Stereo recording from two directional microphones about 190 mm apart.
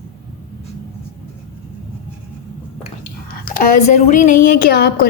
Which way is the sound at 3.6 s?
40° left (ahead or behind).